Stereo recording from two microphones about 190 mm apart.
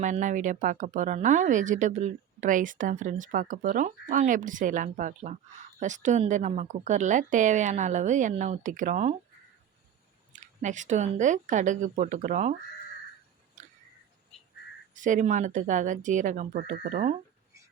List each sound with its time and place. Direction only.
0.0 s speech: 40° right (ahead or behind)
10.3 s speech: 40° right (ahead or behind)
13.6 s a sound: 40° right (ahead or behind)
14.9 s speech: 40° right (ahead or behind)